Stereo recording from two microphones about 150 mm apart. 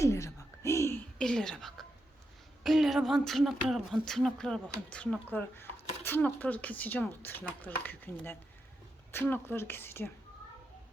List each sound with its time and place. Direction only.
0.0 s a sound: 20° left (ahead or behind)
1.2 s whispering: 5° left (ahead or behind)
2.6 s speech: centre (ahead or behind)